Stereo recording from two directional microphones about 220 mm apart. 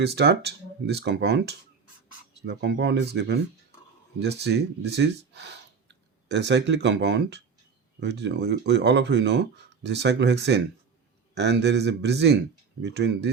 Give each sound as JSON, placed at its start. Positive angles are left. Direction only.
{"t": 0.0, "sound": "speech", "side_deg": -50}